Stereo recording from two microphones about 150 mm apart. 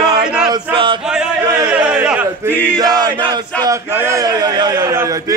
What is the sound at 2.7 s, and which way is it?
A man's voice, 25° right (ahead or behind).